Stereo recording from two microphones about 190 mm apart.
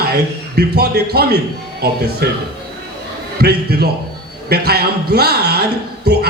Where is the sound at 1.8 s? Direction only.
60° right (ahead or behind).